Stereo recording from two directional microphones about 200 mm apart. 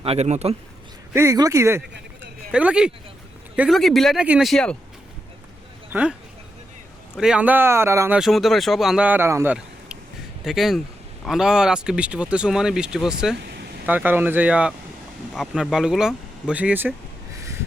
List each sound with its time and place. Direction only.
0.0 s speech: 30° right (ahead or behind)
1.1 s speech: 15° right (ahead or behind); by 4.8 s 5° left (ahead or behind)
5.9 s speech: 5° right (ahead or behind)
7.2 s speech: 5° right (ahead or behind)
8.2 s speech: centre (ahead or behind)